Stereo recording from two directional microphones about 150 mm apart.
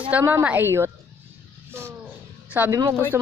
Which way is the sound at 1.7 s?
15° right (ahead or behind).